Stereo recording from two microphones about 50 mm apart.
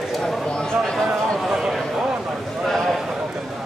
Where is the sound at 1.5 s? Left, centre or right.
Centre.